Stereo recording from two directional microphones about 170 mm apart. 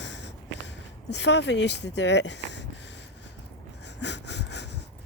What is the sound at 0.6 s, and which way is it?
Speech, 90° left.